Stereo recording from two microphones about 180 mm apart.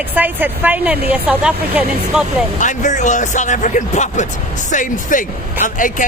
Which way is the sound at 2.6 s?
45° left (ahead or behind).